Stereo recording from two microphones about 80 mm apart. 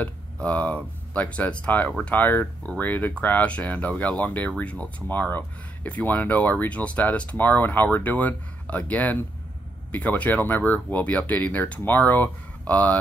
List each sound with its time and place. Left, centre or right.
0.0 s speech: centre